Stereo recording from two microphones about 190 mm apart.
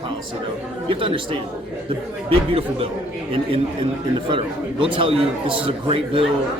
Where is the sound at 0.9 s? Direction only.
25° right (ahead or behind).